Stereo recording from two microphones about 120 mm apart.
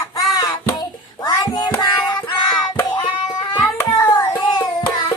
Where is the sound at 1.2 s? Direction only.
35° left (ahead or behind).